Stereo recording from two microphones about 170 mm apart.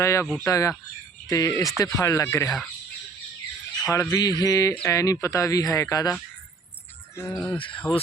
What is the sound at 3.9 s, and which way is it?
Speech, 20° left (ahead or behind).